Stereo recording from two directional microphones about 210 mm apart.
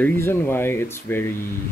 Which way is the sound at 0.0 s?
10° left (ahead or behind).